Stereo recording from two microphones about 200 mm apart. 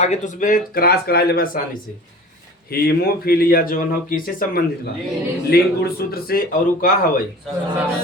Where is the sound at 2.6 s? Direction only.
50° left (ahead or behind).